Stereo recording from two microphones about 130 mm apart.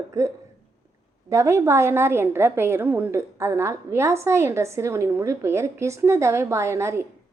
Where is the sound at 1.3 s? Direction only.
20° right (ahead or behind).